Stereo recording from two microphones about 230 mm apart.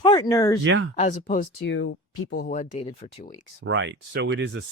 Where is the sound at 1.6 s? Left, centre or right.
Left.